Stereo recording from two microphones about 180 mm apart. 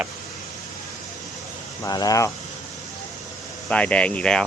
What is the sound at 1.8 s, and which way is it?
Speech, 20° left (ahead or behind).